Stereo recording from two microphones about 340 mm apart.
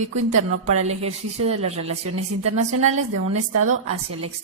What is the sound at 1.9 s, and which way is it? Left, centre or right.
A woman's voice, right.